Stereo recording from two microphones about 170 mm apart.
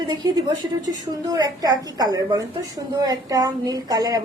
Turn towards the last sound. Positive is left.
turn(degrees=-20)  # may be behind; listen again after turning